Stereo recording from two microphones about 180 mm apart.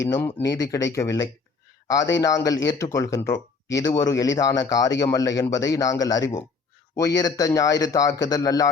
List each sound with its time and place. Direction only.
0.0 s speech: 10° left (ahead or behind)